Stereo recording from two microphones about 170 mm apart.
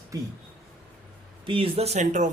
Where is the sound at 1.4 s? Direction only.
30° right (ahead or behind).